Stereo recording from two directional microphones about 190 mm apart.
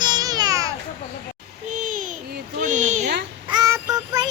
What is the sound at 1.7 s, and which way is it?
Babbling, 40° right (ahead or behind).